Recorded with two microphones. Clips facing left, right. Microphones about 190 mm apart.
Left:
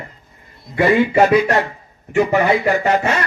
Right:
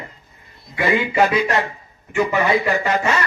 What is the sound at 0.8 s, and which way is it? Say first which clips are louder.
Speech: left 5 dB; 55° left (ahead or behind).